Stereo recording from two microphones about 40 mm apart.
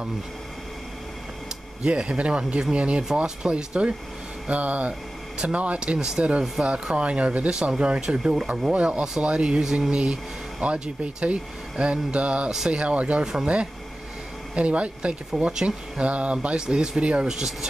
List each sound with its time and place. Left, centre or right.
1.8 s speech: right
4.5 s speech: right
5.9 s speech: centre
6.6 s speech: right
8.2 s speech: centre
8.7 s speech: right
12.4 s speech: centre
13.2 s speech: centre
14.5 s speech: right
16.5 s speech: centre
17.0 s speech: right